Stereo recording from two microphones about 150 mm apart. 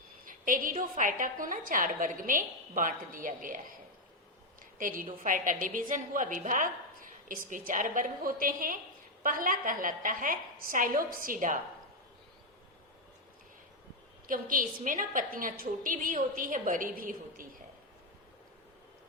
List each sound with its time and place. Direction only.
0.3 s a woman's voice: 65° right (ahead or behind)
4.6 s a woman's voice: 65° right (ahead or behind)
14.3 s a woman's voice: 65° right (ahead or behind)